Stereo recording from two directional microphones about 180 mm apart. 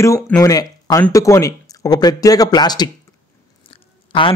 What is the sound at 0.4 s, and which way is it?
A man's voice, 20° left (ahead or behind).